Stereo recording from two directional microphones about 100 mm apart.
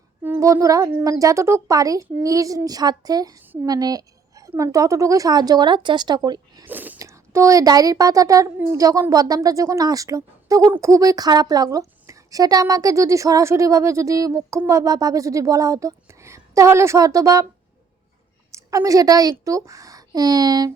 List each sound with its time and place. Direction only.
0.2 s a sound: 20° right (ahead or behind)
0.4 s a woman's voice: 35° right (ahead or behind)
3.4 s a woman's voice: 20° right (ahead or behind)
3.7 s a woman's voice: 40° right (ahead or behind)
6.7 s speech: 20° right (ahead or behind)
7.0 s a woman's voice: 30° right (ahead or behind)
18.5 s a woman's voice: 30° right (ahead or behind)